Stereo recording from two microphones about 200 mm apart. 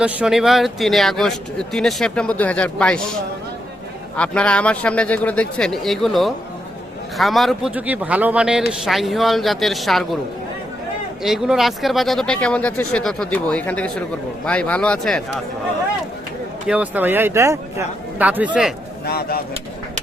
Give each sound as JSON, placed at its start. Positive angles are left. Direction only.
{"t": 0.0, "sound": "speech", "side_deg": -5}
{"t": 4.2, "sound": "speech", "side_deg": 5}
{"t": 11.2, "sound": "speech", "side_deg": 0}
{"t": 16.6, "sound": "a man's voice", "side_deg": -5}
{"t": 19.0, "sound": "speech", "side_deg": 50}